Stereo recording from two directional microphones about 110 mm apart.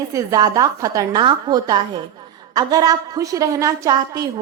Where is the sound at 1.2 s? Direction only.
45° right (ahead or behind).